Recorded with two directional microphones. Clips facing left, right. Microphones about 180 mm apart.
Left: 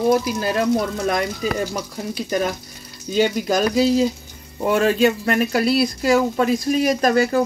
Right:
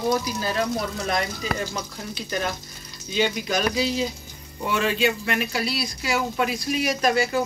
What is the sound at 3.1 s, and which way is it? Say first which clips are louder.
Speech: left 6 dB; 45° left (ahead or behind).